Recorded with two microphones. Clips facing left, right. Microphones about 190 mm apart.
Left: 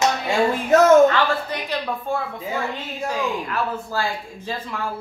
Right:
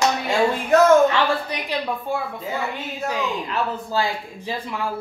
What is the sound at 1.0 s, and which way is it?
Speech, 15° right (ahead or behind).